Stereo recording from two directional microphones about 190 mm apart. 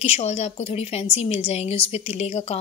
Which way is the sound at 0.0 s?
35° left (ahead or behind).